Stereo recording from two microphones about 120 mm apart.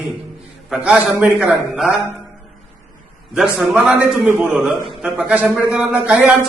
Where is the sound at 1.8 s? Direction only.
Centre (ahead or behind).